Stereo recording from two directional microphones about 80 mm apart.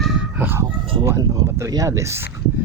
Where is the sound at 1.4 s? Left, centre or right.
Right.